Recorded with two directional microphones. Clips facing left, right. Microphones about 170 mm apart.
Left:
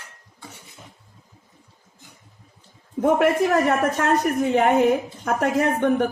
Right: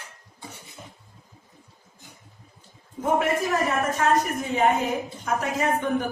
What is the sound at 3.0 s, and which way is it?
A man's voice, 65° left (ahead or behind).